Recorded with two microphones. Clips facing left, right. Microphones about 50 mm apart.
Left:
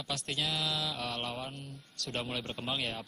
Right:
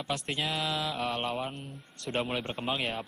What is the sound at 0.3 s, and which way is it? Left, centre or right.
A man's voice, right.